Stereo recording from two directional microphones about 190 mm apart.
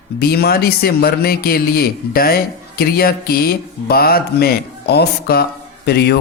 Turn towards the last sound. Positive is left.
turn(degrees=60)  # may be behind; listen again after turning